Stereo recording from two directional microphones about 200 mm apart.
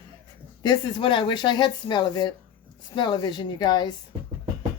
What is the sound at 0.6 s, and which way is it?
Speech, 20° left (ahead or behind).